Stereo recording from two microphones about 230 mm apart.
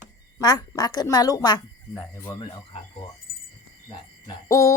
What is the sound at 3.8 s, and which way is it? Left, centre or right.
Hoot, centre.